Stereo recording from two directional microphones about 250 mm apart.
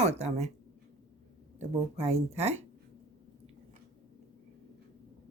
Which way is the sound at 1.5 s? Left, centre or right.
Right.